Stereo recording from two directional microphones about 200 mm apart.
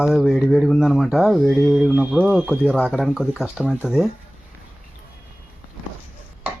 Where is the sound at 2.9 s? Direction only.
5° right (ahead or behind).